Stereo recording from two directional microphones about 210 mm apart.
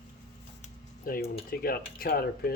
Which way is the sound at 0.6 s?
45° left (ahead or behind).